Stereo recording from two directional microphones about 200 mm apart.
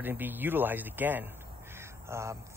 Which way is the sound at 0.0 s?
10° right (ahead or behind).